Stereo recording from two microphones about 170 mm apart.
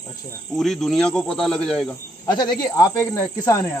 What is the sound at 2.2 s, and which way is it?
Speech, 25° left (ahead or behind).